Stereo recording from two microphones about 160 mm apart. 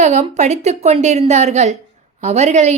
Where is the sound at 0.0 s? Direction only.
45° right (ahead or behind).